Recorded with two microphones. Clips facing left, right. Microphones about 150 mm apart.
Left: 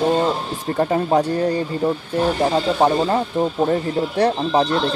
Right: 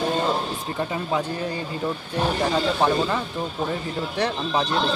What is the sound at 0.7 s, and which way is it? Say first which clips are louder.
Speech: left 9 dB; 50° left (ahead or behind).